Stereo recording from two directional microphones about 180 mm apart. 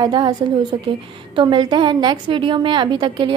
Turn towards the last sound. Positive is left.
turn(degrees=-25)  # may be behind; listen again after turning